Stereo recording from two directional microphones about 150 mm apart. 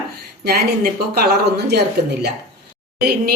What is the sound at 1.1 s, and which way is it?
Speech, 90° right.